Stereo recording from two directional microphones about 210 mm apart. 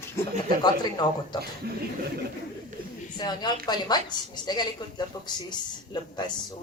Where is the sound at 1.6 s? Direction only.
50° right (ahead or behind).